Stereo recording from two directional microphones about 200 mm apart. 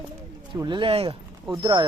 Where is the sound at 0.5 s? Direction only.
25° right (ahead or behind).